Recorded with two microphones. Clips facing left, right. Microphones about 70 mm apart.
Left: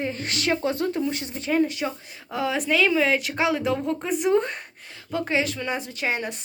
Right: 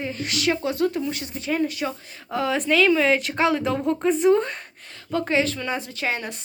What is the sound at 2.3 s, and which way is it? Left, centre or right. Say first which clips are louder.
A woman's voice: right 2 dB; centre.